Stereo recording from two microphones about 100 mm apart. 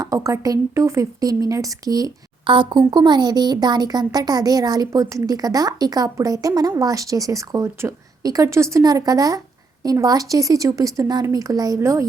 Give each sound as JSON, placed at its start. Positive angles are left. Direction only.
{"t": 0.0, "sound": "a woman's voice", "side_deg": -30}
{"t": 2.5, "sound": "a woman's voice", "side_deg": -50}